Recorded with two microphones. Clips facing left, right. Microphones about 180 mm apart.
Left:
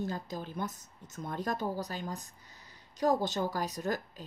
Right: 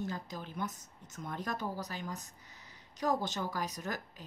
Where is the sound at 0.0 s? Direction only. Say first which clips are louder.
Left 3 dB; 35° left (ahead or behind).